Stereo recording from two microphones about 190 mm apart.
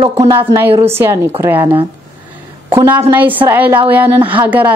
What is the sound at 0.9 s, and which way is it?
A woman's voice, 10° right (ahead or behind).